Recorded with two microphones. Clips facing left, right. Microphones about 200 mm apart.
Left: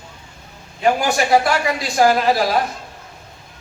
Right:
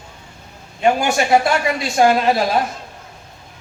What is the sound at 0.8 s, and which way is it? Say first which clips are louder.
A man's voice: right 1 dB; 25° right (ahead or behind).